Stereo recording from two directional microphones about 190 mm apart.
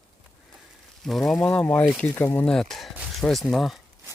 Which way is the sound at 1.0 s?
Centre (ahead or behind).